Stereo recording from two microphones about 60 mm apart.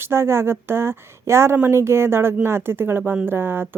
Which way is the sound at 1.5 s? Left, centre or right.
Right.